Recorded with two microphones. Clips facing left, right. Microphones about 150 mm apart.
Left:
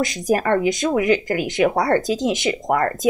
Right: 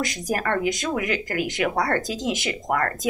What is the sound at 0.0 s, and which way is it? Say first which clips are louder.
Speech: left 6 dB; 25° left (ahead or behind).